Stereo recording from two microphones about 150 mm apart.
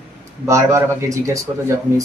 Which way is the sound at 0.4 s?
20° right (ahead or behind).